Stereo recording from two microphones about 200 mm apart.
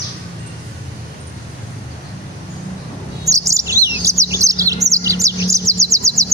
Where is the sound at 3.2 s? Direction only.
15° right (ahead or behind).